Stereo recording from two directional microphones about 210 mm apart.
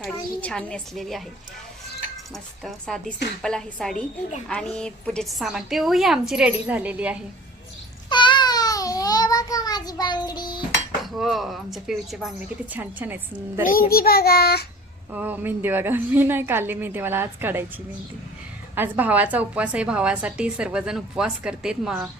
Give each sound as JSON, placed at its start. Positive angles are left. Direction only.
{"t": 0.0, "sound": "a woman's voice", "side_deg": 5}
{"t": 2.3, "sound": "a woman's voice", "side_deg": 0}
{"t": 8.1, "sound": "a sound", "side_deg": 20}
{"t": 11.0, "sound": "a woman's voice", "side_deg": 0}
{"t": 13.7, "sound": "child singing", "side_deg": 45}
{"t": 15.1, "sound": "a woman's voice", "side_deg": -10}
{"t": 18.7, "sound": "a woman's voice", "side_deg": -10}